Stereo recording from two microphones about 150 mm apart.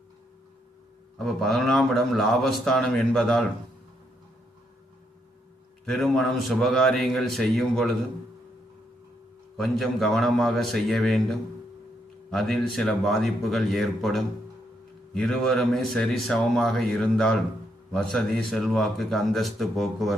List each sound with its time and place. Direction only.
1.2 s speech: centre (ahead or behind)
5.8 s speech: centre (ahead or behind)
9.6 s speech: centre (ahead or behind)